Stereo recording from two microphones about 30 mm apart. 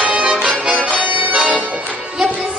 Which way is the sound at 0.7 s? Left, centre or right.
Right.